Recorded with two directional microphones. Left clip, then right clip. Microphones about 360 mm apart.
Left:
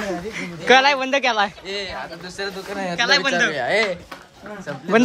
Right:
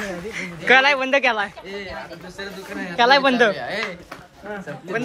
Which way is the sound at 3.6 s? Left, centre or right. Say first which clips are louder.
Left 7 dB; centre.